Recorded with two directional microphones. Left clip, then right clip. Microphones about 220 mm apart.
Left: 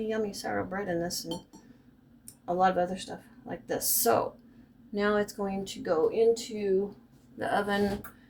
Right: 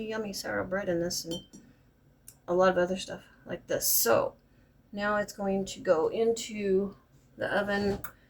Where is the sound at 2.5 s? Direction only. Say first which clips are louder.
Right 1 dB; 20° left (ahead or behind).